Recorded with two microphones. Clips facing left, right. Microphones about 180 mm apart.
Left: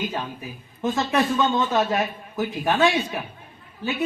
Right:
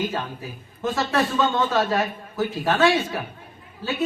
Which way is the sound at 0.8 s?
20° left (ahead or behind).